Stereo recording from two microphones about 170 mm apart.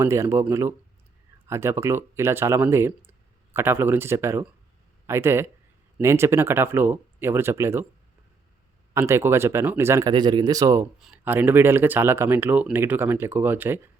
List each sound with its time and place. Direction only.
0.0 s speech: 15° right (ahead or behind)
8.9 s speech: 15° right (ahead or behind)
11.0 s speech: 10° right (ahead or behind)